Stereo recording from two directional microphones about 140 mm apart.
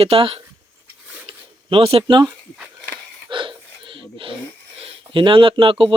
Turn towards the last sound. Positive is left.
turn(degrees=-40)  # may be behind; listen again after turning